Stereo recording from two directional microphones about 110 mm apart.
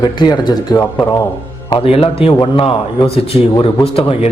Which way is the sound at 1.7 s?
55° left (ahead or behind).